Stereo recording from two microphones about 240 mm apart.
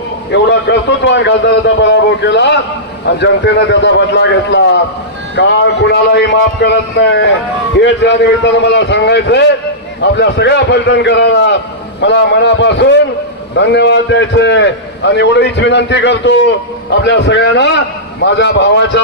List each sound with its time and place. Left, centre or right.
0.3 s a man's voice: left